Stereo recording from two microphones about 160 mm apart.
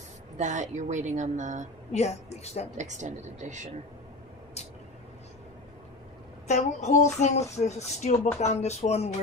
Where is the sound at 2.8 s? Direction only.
50° right (ahead or behind).